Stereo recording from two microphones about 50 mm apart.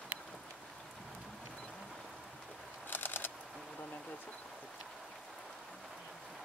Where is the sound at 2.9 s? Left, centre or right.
Left.